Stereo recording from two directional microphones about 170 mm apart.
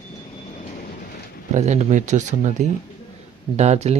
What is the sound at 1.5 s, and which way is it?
Speech, 45° right (ahead or behind).